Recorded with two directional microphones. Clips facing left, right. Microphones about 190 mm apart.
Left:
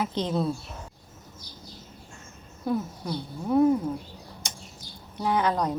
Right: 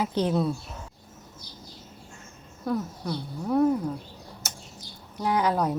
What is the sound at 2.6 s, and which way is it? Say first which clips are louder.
Speech: even; centre (ahead or behind).